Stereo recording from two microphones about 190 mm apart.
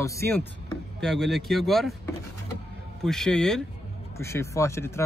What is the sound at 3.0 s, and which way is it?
Speech, 5° left (ahead or behind).